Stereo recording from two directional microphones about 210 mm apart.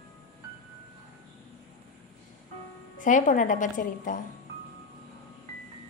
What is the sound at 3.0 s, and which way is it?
A woman's voice, 40° left (ahead or behind).